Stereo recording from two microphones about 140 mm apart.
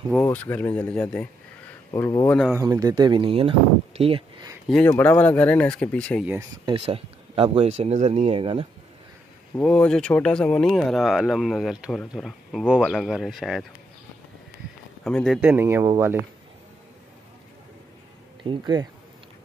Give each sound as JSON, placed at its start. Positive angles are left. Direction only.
{"t": 0.1, "sound": "speech", "side_deg": 10}
{"t": 1.9, "sound": "speech", "side_deg": 25}
{"t": 2.5, "sound": "speech", "side_deg": -20}
{"t": 4.8, "sound": "speech", "side_deg": 15}
{"t": 6.6, "sound": "speech", "side_deg": -40}
{"t": 9.6, "sound": "speech", "side_deg": 5}
{"t": 15.0, "sound": "speech", "side_deg": 5}
{"t": 15.4, "sound": "speech", "side_deg": -15}
{"t": 18.4, "sound": "speech", "side_deg": -35}